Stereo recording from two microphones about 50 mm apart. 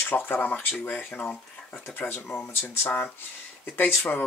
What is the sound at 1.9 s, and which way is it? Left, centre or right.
Speech, left.